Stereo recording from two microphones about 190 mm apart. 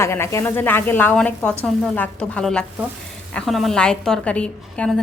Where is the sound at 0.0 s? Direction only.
15° left (ahead or behind).